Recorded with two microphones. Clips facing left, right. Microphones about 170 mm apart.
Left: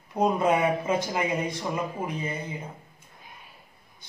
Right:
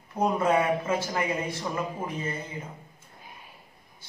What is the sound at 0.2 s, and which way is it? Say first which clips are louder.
A man's voice: left 1 dB; 20° left (ahead or behind).